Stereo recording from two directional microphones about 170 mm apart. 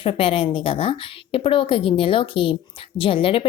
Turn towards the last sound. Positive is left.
turn(degrees=30)  # may be behind; listen again after turning